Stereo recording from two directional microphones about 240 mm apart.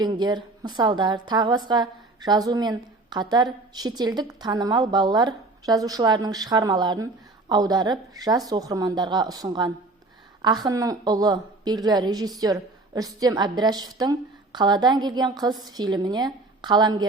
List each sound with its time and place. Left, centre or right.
0.0 s a woman's voice: centre